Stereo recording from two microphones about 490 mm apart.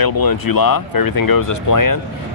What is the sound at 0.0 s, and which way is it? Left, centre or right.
Speech, left.